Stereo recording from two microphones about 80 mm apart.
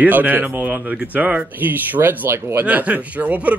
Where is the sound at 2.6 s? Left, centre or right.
Centre.